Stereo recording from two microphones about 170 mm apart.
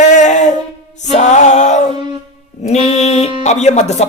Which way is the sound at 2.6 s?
40° left (ahead or behind).